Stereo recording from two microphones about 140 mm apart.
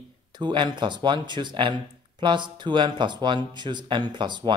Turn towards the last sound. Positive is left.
turn(degrees=-35)  # may be behind; listen again after turning